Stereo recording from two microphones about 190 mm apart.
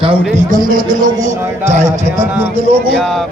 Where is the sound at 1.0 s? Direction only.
40° right (ahead or behind).